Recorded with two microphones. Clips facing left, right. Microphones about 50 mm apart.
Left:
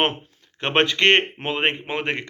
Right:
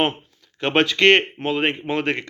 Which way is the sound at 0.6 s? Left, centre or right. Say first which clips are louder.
Right 2 dB; left.